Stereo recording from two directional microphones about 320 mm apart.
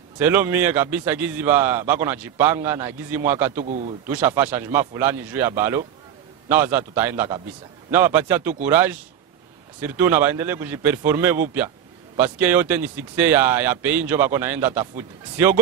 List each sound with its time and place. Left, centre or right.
0.2 s a man's voice: centre
3.6 s speech: right
4.4 s a man's voice: centre